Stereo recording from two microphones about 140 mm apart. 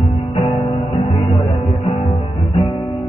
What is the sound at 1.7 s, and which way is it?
Music, centre (ahead or behind).